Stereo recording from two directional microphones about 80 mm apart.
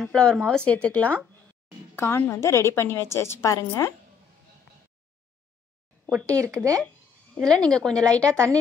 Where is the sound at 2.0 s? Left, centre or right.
Left.